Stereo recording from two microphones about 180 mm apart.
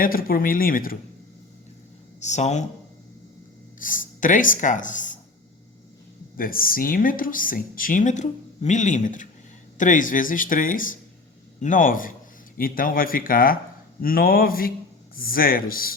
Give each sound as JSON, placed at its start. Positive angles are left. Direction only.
{"t": 0.0, "sound": "speech", "side_deg": 55}
{"t": 2.2, "sound": "speech", "side_deg": 40}
{"t": 3.8, "sound": "speech", "side_deg": 50}
{"t": 6.3, "sound": "speech", "side_deg": 50}